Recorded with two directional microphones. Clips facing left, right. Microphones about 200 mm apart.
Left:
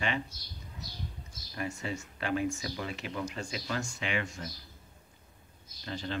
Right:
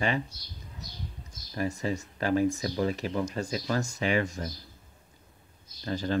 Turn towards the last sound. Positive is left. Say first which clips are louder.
# right 7 dB
turn(degrees=-40)  # may be behind; listen again after turning